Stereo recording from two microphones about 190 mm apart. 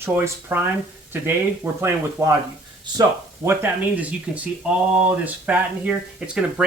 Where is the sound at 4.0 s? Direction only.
5° right (ahead or behind).